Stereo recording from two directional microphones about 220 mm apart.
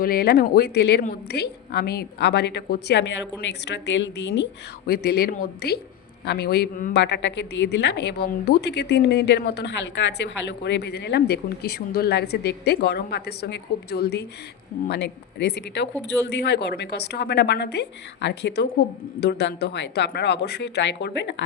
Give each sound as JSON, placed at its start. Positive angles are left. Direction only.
{"t": 0.0, "sound": "speech", "side_deg": 45}
{"t": 7.0, "sound": "speech", "side_deg": 55}